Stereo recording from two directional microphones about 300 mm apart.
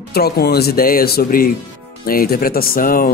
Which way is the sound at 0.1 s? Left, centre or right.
Left.